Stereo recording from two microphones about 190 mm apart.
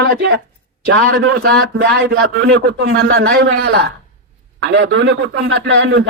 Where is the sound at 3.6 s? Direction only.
60° right (ahead or behind).